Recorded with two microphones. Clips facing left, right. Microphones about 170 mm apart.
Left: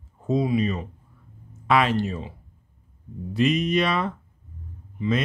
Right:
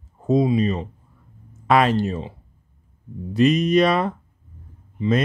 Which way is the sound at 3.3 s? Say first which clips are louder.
Right 5 dB; 40° right (ahead or behind).